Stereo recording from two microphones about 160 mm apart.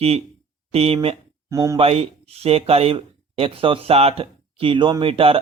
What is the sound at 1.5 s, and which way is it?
Speech, 20° right (ahead or behind).